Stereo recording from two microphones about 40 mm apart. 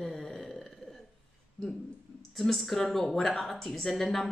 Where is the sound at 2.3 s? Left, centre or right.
Centre.